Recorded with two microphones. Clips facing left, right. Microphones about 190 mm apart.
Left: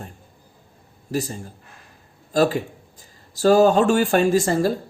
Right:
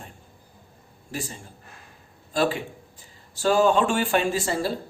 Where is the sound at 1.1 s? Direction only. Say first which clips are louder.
Left 8 dB; 40° left (ahead or behind).